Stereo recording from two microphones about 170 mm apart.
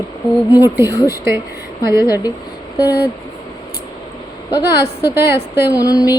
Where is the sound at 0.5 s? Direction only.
15° right (ahead or behind).